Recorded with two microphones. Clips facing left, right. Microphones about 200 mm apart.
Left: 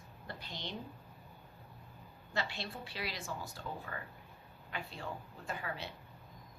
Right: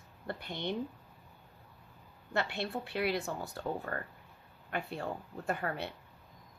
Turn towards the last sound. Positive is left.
turn(degrees=-55)  # may be behind; listen again after turning